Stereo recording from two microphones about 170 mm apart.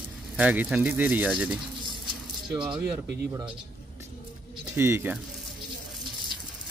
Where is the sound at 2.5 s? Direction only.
25° right (ahead or behind).